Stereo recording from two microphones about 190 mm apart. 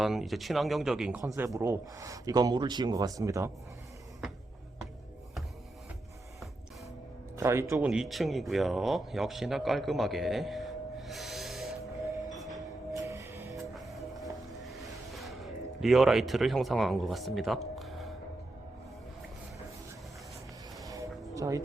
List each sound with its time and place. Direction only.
0.0 s speech: centre (ahead or behind)
1.5 s speech: 15° right (ahead or behind)
7.3 s speech: 15° right (ahead or behind)
12.5 s music: 20° right (ahead or behind)
13.7 s music: centre (ahead or behind)
14.5 s a sound: centre (ahead or behind)
20.8 s music: 15° right (ahead or behind)